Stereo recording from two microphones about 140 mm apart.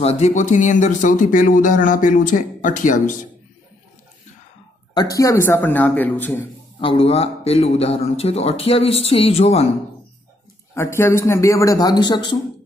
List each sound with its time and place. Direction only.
0.0 s speech: 50° left (ahead or behind)
4.9 s speech: 25° left (ahead or behind)
6.8 s speech: 40° left (ahead or behind)
10.7 s a man's voice: 20° left (ahead or behind)